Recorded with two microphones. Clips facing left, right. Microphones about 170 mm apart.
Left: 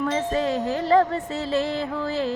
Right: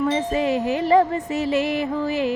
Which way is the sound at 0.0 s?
15° right (ahead or behind).